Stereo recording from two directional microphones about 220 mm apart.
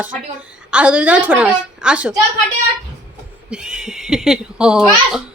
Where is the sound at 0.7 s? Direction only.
5° right (ahead or behind).